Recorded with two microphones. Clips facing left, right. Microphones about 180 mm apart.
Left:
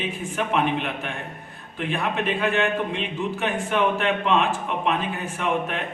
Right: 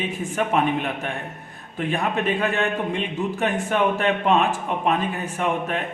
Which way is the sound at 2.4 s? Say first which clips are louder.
Even; 40° right (ahead or behind).